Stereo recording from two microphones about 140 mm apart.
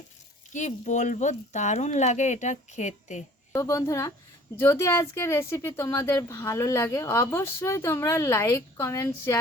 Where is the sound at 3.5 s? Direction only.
20° left (ahead or behind).